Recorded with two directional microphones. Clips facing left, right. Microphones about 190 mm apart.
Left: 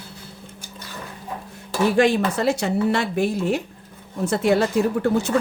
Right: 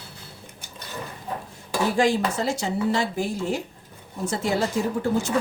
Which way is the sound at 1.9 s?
65° left (ahead or behind).